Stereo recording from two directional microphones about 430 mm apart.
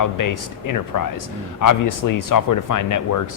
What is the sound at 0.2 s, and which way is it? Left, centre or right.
Speech, left.